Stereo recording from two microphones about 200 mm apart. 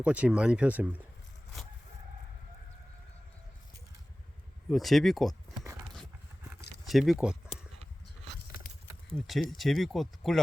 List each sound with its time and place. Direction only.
0.0 s speech: 5° right (ahead or behind)
4.7 s speech: centre (ahead or behind)
6.8 s speech: centre (ahead or behind)
8.7 s a sound: 45° left (ahead or behind)
9.1 s speech: centre (ahead or behind)